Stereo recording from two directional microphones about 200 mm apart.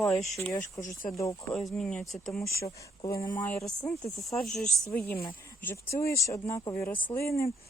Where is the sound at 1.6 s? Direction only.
Centre (ahead or behind).